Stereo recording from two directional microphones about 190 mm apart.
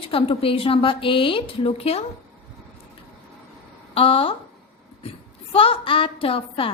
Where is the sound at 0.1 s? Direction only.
30° left (ahead or behind).